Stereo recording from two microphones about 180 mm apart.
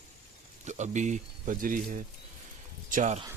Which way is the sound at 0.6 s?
40° right (ahead or behind).